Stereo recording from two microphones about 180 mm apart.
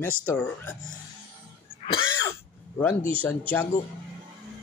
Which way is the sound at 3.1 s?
10° left (ahead or behind).